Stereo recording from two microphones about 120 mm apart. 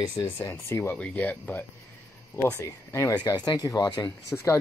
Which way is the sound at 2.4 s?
25° left (ahead or behind).